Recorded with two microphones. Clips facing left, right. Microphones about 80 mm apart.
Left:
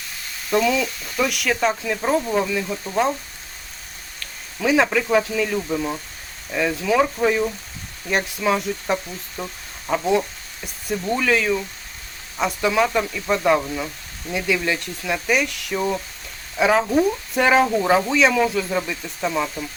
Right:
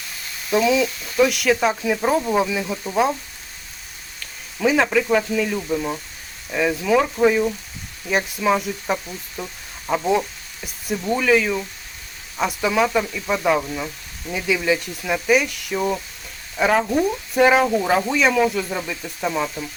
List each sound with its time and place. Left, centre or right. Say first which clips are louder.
0.5 s speech: right 2 dB; centre
4.2 s speech: right 4 dB; centre